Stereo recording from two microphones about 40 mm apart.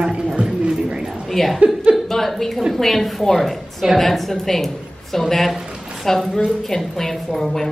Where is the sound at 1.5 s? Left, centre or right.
Right.